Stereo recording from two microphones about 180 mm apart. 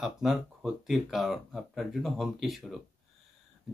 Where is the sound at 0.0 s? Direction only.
Centre (ahead or behind).